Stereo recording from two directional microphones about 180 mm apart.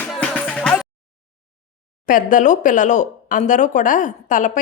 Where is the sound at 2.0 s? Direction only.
50° left (ahead or behind).